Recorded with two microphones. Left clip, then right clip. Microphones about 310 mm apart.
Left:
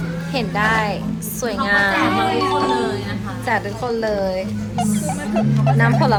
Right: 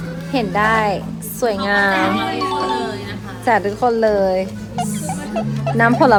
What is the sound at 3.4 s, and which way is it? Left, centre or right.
Speech, right.